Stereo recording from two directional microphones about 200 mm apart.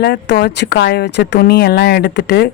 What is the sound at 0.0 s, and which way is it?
A woman's voice, 55° left (ahead or behind).